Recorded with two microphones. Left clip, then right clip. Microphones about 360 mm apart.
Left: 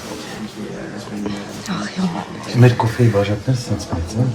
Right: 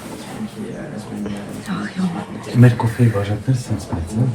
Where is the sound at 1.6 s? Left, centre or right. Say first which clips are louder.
Left 2 dB; centre.